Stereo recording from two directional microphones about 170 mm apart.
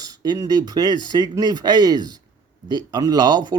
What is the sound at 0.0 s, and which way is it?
Speech, 20° right (ahead or behind).